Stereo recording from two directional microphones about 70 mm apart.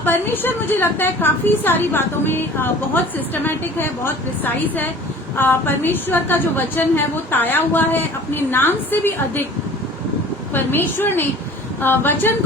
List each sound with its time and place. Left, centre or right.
0.0 s a woman's voice: left
10.5 s a woman's voice: left